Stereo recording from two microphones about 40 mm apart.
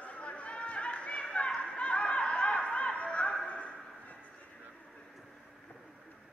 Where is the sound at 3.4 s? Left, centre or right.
Left.